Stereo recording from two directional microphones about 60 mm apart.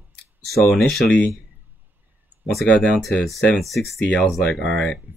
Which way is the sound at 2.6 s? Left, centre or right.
Centre.